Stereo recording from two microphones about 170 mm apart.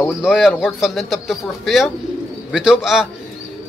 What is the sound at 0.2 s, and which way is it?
A man's voice, 5° right (ahead or behind).